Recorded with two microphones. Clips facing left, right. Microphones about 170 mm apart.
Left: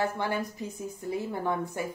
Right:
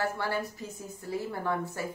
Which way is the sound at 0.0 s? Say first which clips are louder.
Left 2 dB; 20° left (ahead or behind).